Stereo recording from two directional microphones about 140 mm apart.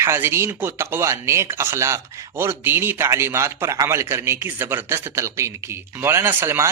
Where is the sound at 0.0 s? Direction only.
15° right (ahead or behind).